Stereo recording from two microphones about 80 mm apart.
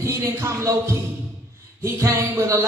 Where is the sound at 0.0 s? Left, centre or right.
Right.